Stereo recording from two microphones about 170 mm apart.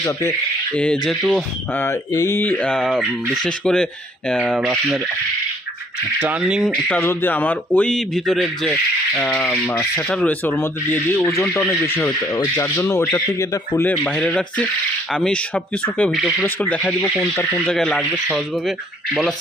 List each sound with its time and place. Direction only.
0.0 s speech: 15° left (ahead or behind)
1.0 s speech: 5° left (ahead or behind)
1.7 s speech: 15° left (ahead or behind); by 4.7 s centre (ahead or behind)
6.1 s speech: 10° right (ahead or behind); by 13.9 s 20° left (ahead or behind)
13.9 s speech: 5° left (ahead or behind)